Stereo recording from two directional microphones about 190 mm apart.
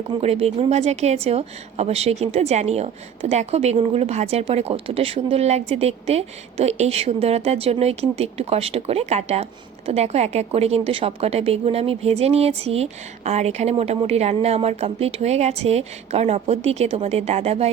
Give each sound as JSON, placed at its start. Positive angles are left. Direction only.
{"t": 0.2, "sound": "speech", "side_deg": -30}